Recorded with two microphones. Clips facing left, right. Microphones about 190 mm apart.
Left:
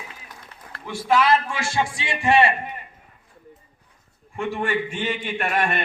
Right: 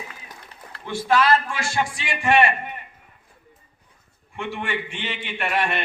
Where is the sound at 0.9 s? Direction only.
10° left (ahead or behind); by 2.5 s 30° left (ahead or behind).